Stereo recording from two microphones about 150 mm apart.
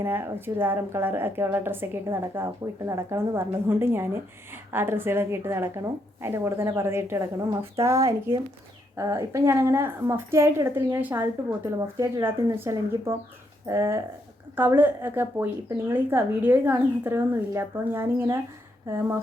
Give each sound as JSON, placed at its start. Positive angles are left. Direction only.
{"t": 0.0, "sound": "speech", "side_deg": -15}